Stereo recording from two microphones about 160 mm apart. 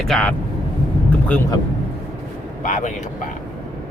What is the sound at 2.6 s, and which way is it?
Speech, 50° left (ahead or behind).